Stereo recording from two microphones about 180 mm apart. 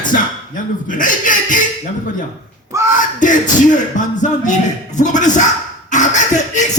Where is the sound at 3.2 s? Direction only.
45° left (ahead or behind).